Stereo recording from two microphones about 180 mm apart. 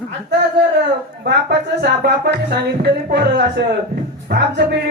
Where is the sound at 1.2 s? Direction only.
70° right (ahead or behind).